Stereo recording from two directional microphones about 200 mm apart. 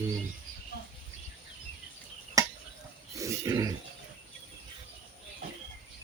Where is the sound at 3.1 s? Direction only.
15° right (ahead or behind).